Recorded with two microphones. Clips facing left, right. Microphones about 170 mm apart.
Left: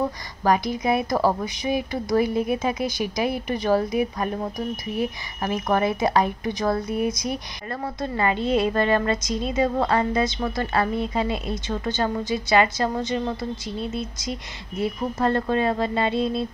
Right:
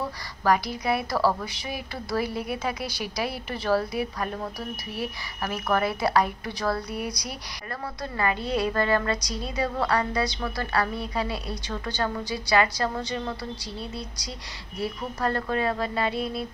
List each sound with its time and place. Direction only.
0.4 s a woman's voice: 20° left (ahead or behind)